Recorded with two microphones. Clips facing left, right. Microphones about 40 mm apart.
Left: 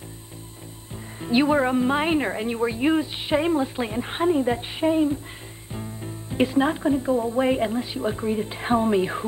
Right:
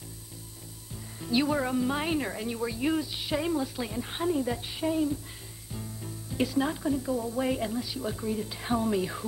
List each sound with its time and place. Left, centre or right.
1.2 s speech: left